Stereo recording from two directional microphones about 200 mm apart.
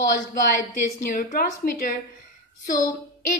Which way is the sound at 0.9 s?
45° left (ahead or behind).